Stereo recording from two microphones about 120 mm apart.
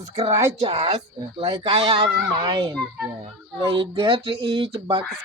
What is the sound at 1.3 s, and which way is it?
Speech, 55° right (ahead or behind).